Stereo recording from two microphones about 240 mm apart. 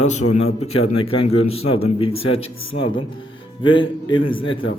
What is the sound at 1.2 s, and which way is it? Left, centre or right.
A man's voice, left.